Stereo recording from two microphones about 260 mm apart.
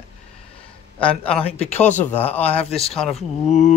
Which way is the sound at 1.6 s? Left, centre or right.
Left.